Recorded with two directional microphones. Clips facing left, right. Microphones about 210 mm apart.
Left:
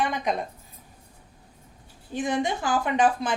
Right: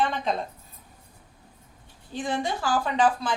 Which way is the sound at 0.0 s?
15° left (ahead or behind).